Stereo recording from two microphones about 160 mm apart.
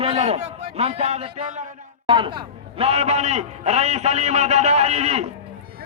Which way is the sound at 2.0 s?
30° right (ahead or behind).